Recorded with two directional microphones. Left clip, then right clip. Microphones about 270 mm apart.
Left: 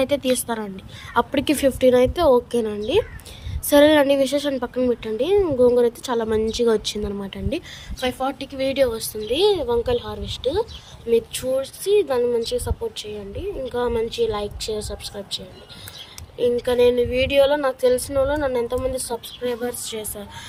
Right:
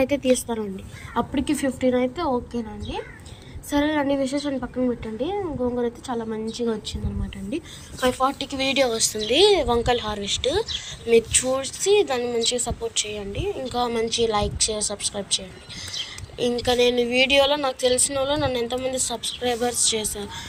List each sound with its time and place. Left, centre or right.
0.0 s a woman's voice: centre
8.0 s speech: centre
16.4 s speech: centre